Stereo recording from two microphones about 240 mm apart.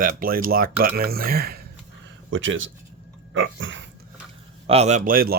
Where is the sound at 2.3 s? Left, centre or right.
Right.